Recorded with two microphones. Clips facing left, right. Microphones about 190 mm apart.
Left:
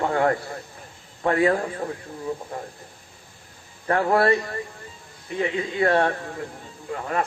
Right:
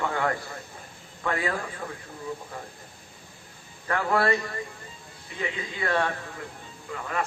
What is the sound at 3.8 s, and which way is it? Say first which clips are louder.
Speech: left 5 dB; 40° left (ahead or behind).